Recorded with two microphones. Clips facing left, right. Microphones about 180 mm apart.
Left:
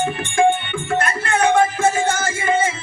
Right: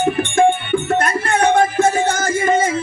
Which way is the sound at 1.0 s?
40° right (ahead or behind).